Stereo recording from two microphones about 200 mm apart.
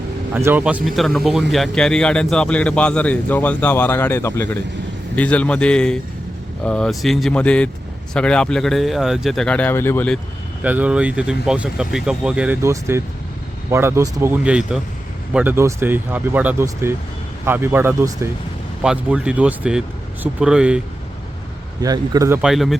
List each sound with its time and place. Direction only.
0.3 s a man's voice: 10° right (ahead or behind); by 10.2 s 10° left (ahead or behind)
10.6 s a man's voice: 5° right (ahead or behind)
21.8 s speech: 20° right (ahead or behind)
22.4 s a man's voice: centre (ahead or behind)